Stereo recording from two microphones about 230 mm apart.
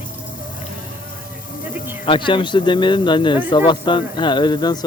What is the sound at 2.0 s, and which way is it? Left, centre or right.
Speech, left.